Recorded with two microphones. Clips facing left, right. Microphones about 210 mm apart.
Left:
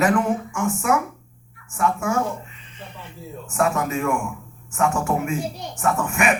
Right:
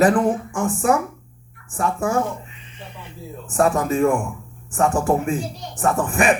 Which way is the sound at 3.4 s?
35° right (ahead or behind).